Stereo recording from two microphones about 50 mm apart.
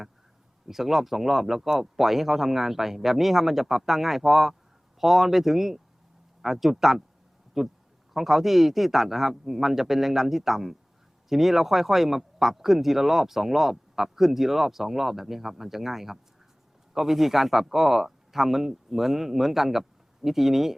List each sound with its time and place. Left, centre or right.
0.7 s speech: centre